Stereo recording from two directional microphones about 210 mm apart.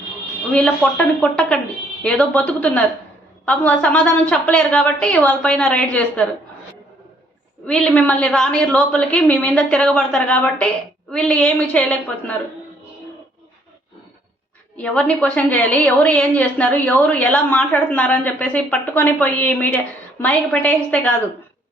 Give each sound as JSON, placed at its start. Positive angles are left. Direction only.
{"t": 0.5, "sound": "a woman's voice", "side_deg": 5}
{"t": 7.7, "sound": "a woman's voice", "side_deg": 5}
{"t": 14.8, "sound": "a woman's voice", "side_deg": 5}